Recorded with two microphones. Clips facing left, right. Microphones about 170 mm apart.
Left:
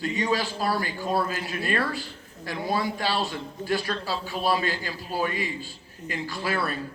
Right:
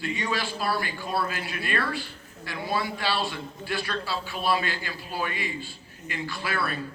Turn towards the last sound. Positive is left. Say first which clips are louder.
# left 2 dB
turn(degrees=40)  # may be behind; listen again after turning